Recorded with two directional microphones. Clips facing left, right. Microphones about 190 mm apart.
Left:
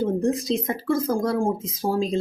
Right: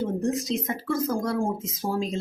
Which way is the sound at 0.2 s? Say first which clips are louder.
Left 3 dB; 30° left (ahead or behind).